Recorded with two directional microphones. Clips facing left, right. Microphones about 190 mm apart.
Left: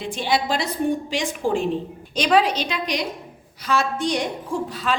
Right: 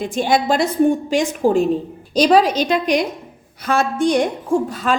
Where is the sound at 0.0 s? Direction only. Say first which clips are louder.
Right 5 dB; 45° right (ahead or behind).